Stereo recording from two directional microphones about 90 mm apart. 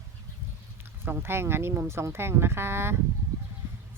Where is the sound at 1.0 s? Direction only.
25° right (ahead or behind).